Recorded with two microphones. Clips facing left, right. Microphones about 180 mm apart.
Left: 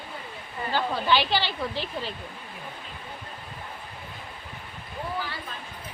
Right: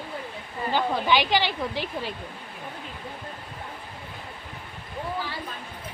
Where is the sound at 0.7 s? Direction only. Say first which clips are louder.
Right 1 dB; 15° right (ahead or behind).